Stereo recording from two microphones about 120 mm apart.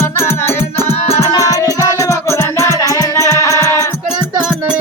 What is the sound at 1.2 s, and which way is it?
Music, 25° left (ahead or behind).